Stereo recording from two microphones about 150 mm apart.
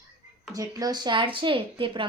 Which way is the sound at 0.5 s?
25° right (ahead or behind).